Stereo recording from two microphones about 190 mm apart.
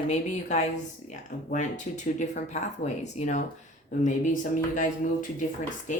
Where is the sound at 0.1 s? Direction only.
35° left (ahead or behind).